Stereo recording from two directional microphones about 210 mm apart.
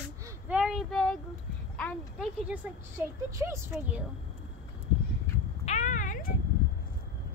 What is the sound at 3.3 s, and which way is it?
Speech, 15° right (ahead or behind).